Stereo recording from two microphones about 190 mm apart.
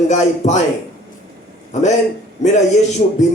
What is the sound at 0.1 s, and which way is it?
Speech, 35° left (ahead or behind).